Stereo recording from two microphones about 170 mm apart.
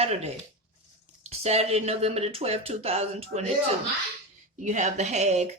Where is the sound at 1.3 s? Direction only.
40° right (ahead or behind).